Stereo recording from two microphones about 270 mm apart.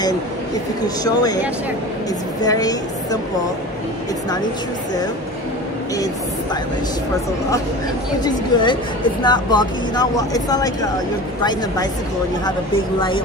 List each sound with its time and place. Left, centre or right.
0.8 s a woman's voice: centre
2.4 s a woman's voice: centre
8.2 s a woman's voice: centre